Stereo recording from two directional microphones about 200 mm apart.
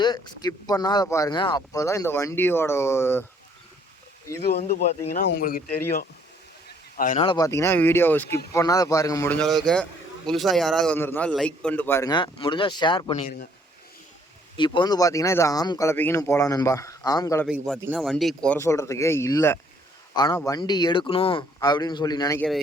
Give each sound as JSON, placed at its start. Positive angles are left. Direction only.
{"t": 0.0, "sound": "a man's voice", "side_deg": 20}
{"t": 4.3, "sound": "a man's voice", "side_deg": 15}
{"t": 5.1, "sound": "speech", "side_deg": 50}
{"t": 6.9, "sound": "speech", "side_deg": 45}
{"t": 7.2, "sound": "a man's voice", "side_deg": 20}
{"t": 14.5, "sound": "a man's voice", "side_deg": 25}
{"t": 17.9, "sound": "a man's voice", "side_deg": 0}
{"t": 22.4, "sound": "speech", "side_deg": 0}